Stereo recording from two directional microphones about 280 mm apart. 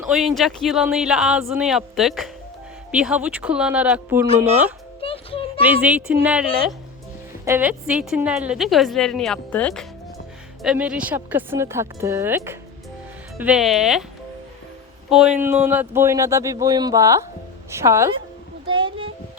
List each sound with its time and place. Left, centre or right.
0.0 s a woman's voice: centre
5.0 s music: centre
5.6 s a woman's voice: centre
15.1 s speech: centre